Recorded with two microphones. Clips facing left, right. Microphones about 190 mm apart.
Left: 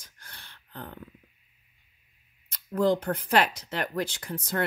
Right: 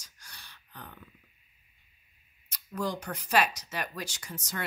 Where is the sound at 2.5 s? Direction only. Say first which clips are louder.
Left 9 dB; 55° left (ahead or behind).